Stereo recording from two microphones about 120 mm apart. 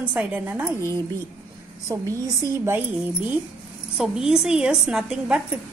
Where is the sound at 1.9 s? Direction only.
25° right (ahead or behind).